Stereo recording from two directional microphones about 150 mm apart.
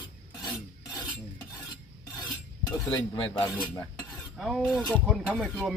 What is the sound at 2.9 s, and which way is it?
Speech, 25° left (ahead or behind).